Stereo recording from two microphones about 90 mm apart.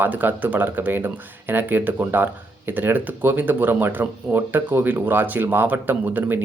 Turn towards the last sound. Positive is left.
turn(degrees=-20)  # may be behind; listen again after turning